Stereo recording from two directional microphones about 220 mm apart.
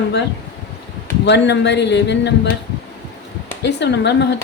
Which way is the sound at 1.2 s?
50° left (ahead or behind).